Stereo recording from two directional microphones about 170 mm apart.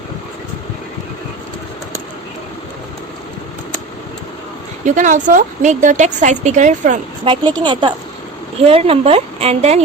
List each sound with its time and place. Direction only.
4.9 s a woman's voice: 50° right (ahead or behind)
7.3 s speech: 25° right (ahead or behind)